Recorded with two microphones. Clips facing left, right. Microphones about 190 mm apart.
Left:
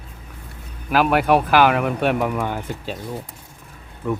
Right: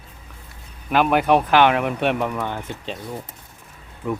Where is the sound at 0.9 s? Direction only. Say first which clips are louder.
Even; centre (ahead or behind).